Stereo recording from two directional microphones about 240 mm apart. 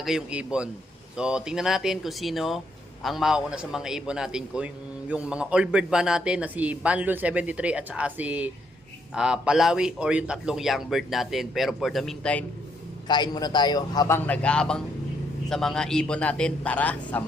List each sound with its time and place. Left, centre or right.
0.0 s a man's voice: centre
13.1 s a man's voice: centre
14.3 s a man's voice: centre